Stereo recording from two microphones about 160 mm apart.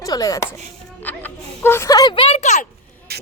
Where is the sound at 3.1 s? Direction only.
75° right (ahead or behind).